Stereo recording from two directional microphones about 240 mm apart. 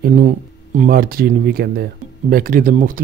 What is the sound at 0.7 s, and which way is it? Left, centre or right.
Speech, right.